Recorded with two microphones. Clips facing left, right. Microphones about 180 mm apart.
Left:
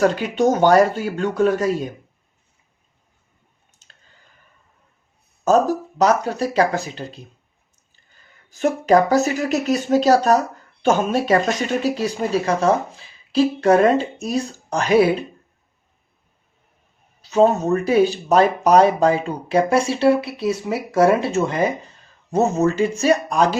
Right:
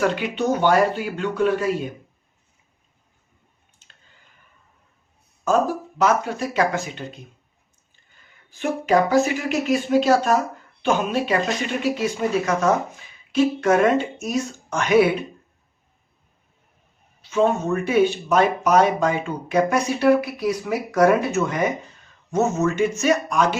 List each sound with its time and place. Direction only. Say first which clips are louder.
0.0 s speech: left 5 dB; 40° left (ahead or behind)
3.8 s a sound: left 1 dB; 40° left (ahead or behind)
5.5 s speech: left 4 dB; 40° left (ahead or behind)
8.4 s speech: left 5 dB; 40° left (ahead or behind)
17.2 s speech: left 4 dB; 35° left (ahead or behind)